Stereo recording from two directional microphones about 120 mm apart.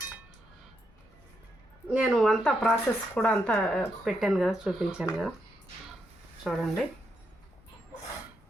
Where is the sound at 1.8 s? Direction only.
5° right (ahead or behind).